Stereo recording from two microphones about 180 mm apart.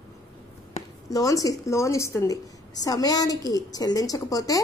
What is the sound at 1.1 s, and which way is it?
A woman's voice, 20° left (ahead or behind).